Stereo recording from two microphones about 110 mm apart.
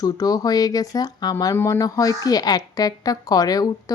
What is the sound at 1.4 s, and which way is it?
Speech, 25° left (ahead or behind).